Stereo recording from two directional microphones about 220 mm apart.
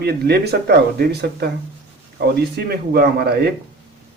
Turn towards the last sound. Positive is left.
turn(degrees=-45)  # may be behind; listen again after turning